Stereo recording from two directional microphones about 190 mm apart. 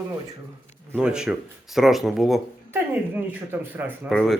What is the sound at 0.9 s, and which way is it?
Speech, 5° right (ahead or behind).